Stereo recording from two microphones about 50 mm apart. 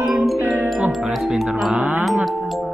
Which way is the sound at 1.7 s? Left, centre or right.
Right.